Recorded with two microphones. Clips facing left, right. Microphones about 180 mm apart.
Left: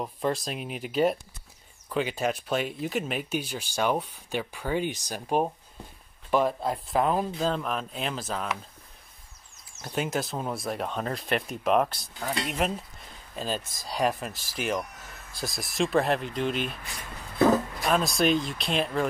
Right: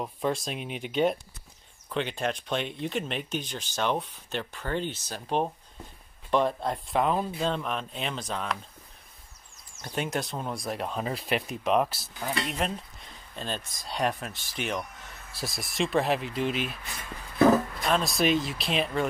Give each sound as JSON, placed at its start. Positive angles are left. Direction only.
{"t": 0.0, "sound": "speech", "side_deg": 0}
{"t": 9.8, "sound": "speech", "side_deg": 0}
{"t": 17.7, "sound": "speech", "side_deg": 0}